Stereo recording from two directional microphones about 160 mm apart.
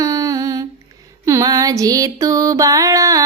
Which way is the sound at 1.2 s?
20° right (ahead or behind).